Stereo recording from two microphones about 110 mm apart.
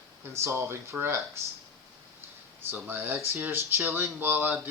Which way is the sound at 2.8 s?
15° right (ahead or behind).